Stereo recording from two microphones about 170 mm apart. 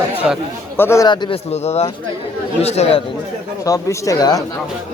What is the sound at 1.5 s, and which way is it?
Speech, 40° left (ahead or behind).